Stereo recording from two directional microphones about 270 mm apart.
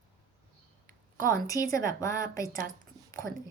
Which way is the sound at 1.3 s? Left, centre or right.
Centre.